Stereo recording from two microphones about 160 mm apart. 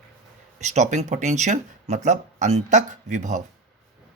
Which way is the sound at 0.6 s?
45° right (ahead or behind).